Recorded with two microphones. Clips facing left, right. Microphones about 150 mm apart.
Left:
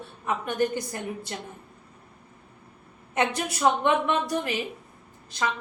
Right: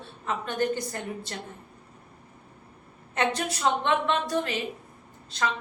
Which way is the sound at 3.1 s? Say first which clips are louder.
Left 1 dB; 10° left (ahead or behind).